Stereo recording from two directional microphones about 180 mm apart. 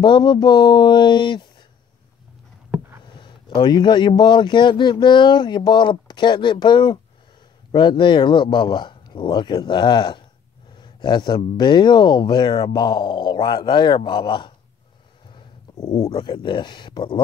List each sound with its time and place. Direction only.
0.0 s speech: 25° left (ahead or behind)
3.2 s speech: 25° left (ahead or behind)